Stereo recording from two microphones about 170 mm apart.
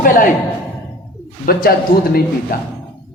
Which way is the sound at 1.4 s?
60° left (ahead or behind).